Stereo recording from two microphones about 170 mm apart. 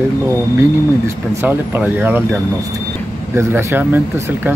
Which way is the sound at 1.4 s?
10° right (ahead or behind).